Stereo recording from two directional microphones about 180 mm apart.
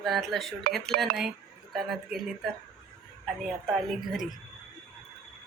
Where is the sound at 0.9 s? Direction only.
50° right (ahead or behind).